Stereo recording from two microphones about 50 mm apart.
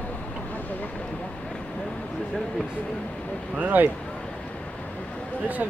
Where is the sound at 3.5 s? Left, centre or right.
Right.